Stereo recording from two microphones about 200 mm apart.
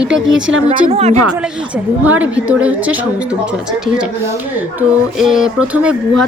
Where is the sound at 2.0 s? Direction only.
10° right (ahead or behind).